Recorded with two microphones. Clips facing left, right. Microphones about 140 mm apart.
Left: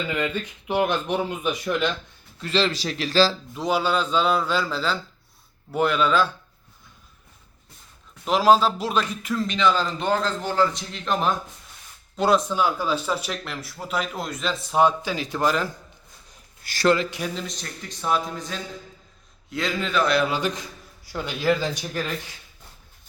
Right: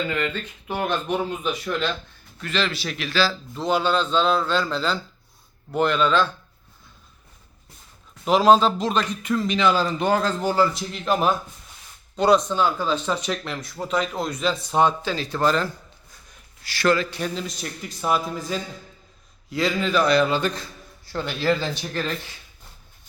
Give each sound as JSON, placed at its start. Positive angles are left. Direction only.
{"t": 0.1, "sound": "a man's voice", "side_deg": 15}
{"t": 2.4, "sound": "speech", "side_deg": 30}
{"t": 3.5, "sound": "a man's voice", "side_deg": 5}
{"t": 8.2, "sound": "speech", "side_deg": 0}
{"t": 16.8, "sound": "a man's voice", "side_deg": 20}
{"t": 17.2, "sound": "a man's voice", "side_deg": 5}